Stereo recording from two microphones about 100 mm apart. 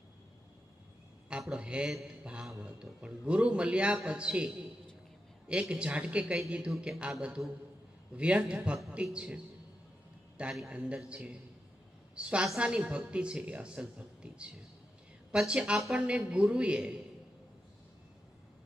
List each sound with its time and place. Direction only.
1.3 s a man's voice: 5° right (ahead or behind)
10.5 s a man's voice: centre (ahead or behind)